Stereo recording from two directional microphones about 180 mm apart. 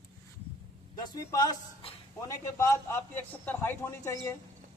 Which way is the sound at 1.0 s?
25° left (ahead or behind).